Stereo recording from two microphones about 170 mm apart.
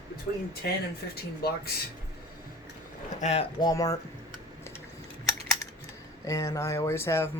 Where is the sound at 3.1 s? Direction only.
40° left (ahead or behind).